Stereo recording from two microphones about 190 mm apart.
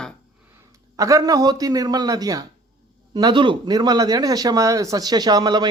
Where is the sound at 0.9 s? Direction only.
15° right (ahead or behind).